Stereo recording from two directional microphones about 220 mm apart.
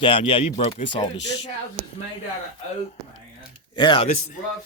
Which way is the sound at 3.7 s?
20° left (ahead or behind).